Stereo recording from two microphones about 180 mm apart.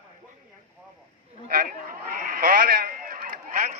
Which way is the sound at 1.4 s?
50° right (ahead or behind).